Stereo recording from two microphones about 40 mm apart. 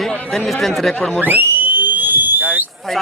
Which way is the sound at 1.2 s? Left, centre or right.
Right.